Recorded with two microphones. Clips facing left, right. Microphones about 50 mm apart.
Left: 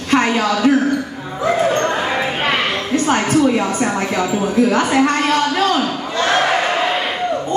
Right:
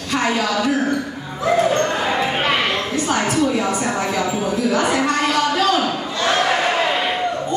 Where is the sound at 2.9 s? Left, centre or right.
Left.